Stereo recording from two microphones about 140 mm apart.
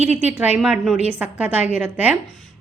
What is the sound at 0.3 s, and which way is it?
A woman's voice, 10° right (ahead or behind).